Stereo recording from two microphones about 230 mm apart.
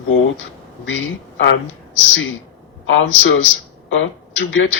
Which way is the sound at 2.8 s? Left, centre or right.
Left.